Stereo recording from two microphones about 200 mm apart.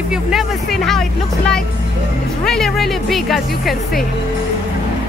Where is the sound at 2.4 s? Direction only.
Centre (ahead or behind).